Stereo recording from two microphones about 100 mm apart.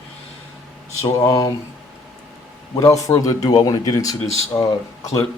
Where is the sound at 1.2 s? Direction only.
40° left (ahead or behind).